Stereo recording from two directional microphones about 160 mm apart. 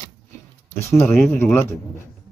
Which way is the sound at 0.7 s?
15° left (ahead or behind).